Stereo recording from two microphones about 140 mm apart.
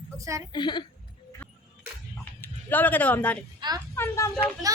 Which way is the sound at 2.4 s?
10° left (ahead or behind).